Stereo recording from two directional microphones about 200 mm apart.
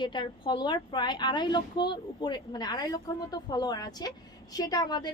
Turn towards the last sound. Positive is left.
turn(degrees=20)  # may be behind; listen again after turning